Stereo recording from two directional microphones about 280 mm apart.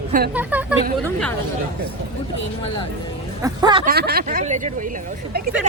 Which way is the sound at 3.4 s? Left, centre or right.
Centre.